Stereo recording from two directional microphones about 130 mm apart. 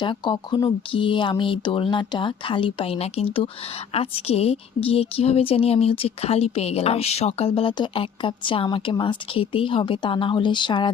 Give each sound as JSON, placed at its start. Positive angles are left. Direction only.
{"t": 0.0, "sound": "a woman's voice", "side_deg": 40}